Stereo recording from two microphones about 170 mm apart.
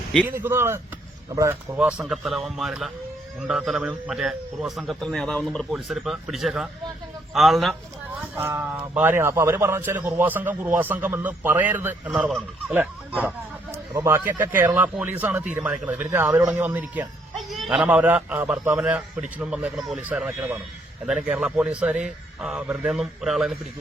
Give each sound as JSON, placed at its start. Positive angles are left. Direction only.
{"t": 0.3, "sound": "a man's voice", "side_deg": -15}
{"t": 8.4, "sound": "a man's voice", "side_deg": -10}
{"t": 17.3, "sound": "a man's voice", "side_deg": 0}